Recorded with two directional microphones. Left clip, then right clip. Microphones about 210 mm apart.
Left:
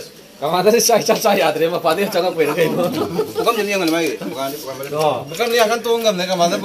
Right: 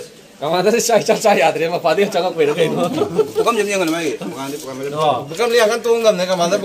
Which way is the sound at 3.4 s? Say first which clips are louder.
Right 1 dB; 35° right (ahead or behind).